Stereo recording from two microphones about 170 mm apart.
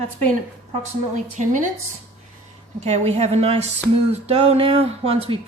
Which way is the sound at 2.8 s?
40° right (ahead or behind).